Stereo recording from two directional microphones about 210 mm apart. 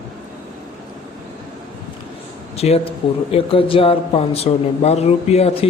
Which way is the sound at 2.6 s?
30° left (ahead or behind).